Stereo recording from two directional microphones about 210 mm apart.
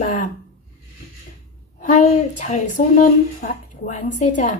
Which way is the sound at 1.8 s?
35° left (ahead or behind).